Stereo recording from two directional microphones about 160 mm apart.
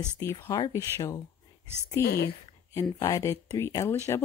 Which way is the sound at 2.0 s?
80° left.